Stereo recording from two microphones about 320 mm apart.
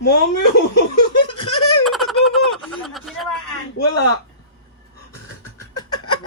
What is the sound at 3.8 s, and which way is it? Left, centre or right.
Speech, left.